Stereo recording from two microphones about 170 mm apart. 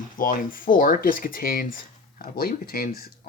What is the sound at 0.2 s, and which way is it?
Speech, 55° left (ahead or behind).